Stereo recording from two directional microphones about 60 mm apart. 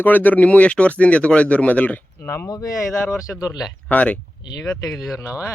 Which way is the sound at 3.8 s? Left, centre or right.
Left.